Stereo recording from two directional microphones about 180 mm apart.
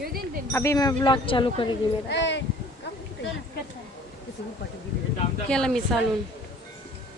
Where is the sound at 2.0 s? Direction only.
75° left (ahead or behind).